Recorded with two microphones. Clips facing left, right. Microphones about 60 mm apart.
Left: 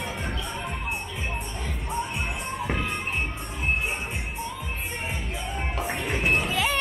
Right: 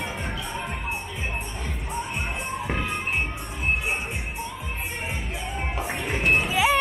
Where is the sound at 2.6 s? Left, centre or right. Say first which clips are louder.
Left 1 dB; centre.